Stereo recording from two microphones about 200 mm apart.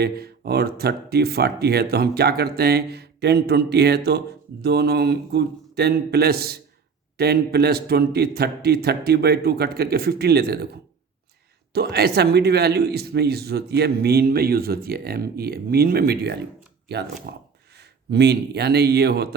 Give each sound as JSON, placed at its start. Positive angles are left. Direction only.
{"t": 0.0, "sound": "a man's voice", "side_deg": -55}
{"t": 11.7, "sound": "a man's voice", "side_deg": -55}